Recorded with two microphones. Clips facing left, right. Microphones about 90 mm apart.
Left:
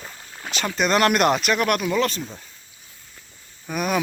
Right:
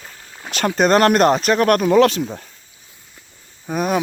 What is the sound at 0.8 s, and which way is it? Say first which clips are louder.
Speech: right 5 dB; 40° right (ahead or behind).